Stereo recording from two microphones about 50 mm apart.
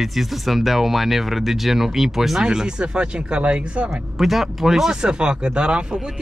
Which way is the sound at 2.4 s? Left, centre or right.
Centre.